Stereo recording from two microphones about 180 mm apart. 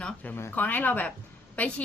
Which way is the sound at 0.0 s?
10° left (ahead or behind).